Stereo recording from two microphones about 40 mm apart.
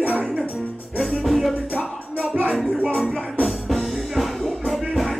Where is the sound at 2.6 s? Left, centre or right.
Right.